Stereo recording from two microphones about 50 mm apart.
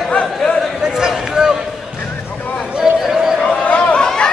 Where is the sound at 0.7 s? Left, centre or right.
Centre.